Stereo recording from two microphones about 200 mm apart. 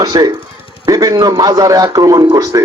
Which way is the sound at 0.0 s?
20° right (ahead or behind).